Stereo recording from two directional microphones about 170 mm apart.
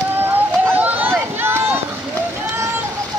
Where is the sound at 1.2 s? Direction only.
15° right (ahead or behind).